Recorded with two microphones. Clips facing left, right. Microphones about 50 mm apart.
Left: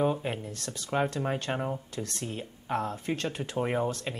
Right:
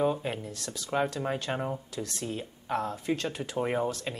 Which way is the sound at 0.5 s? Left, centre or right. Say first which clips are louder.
Even; left.